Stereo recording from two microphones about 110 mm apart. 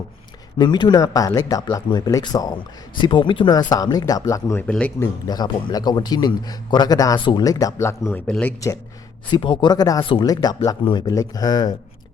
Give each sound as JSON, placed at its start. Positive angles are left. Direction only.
{"t": 0.6, "sound": "a man's voice", "side_deg": 40}
{"t": 4.6, "sound": "speech", "side_deg": 10}
{"t": 4.9, "sound": "a man's voice", "side_deg": 40}
{"t": 7.2, "sound": "speech", "side_deg": 45}
{"t": 7.4, "sound": "speech", "side_deg": 35}
{"t": 8.3, "sound": "speech", "side_deg": 10}
{"t": 9.3, "sound": "a man's voice", "side_deg": 45}
{"t": 10.0, "sound": "speech", "side_deg": 50}
{"t": 10.2, "sound": "a man's voice", "side_deg": 35}